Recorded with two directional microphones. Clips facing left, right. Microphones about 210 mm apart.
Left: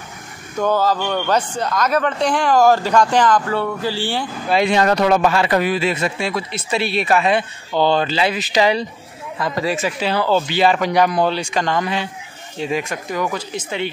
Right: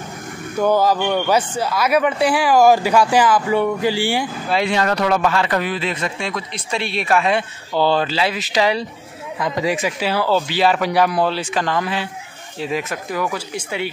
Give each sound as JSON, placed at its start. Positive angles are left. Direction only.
{"t": 0.6, "sound": "a man's voice", "side_deg": -10}
{"t": 4.5, "sound": "speech", "side_deg": 20}
{"t": 9.4, "sound": "speech", "side_deg": -15}